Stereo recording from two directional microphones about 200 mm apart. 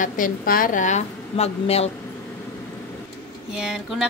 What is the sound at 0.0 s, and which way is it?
A woman's voice, 45° left (ahead or behind).